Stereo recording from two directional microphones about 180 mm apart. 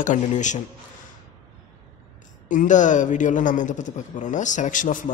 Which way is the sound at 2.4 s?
45° left (ahead or behind).